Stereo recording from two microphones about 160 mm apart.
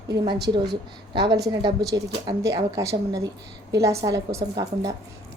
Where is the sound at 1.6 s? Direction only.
25° right (ahead or behind).